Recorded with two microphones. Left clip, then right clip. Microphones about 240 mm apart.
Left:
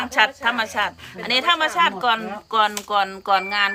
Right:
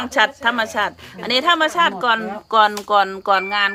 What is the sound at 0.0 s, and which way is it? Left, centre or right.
A woman's voice, right.